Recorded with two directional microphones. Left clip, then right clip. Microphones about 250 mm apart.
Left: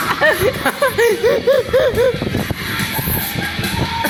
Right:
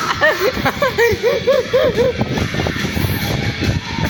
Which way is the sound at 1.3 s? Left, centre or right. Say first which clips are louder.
Left 1 dB; centre.